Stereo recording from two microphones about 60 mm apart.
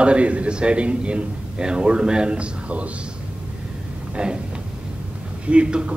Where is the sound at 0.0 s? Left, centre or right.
Centre.